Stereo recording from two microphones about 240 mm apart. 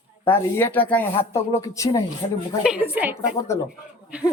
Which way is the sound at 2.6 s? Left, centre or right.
Centre.